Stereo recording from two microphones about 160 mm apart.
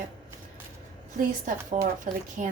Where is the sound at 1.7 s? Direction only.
55° right (ahead or behind).